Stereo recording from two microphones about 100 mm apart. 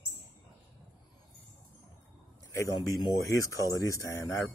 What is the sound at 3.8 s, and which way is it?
Speech, 30° left (ahead or behind).